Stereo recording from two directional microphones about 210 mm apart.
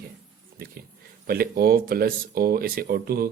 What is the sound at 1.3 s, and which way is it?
Speech, 45° right (ahead or behind).